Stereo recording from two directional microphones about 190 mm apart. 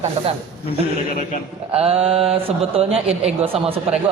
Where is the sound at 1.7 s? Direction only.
30° right (ahead or behind).